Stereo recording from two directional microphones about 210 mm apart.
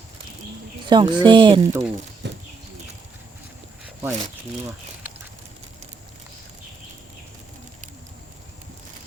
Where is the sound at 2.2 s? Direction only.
55° right (ahead or behind).